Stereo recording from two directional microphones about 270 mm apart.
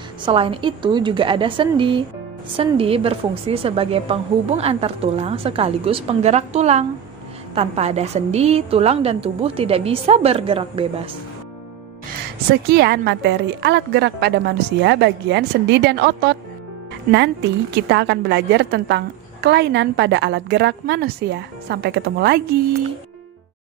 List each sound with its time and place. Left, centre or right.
0.2 s a woman's voice: centre
12.7 s a woman's voice: right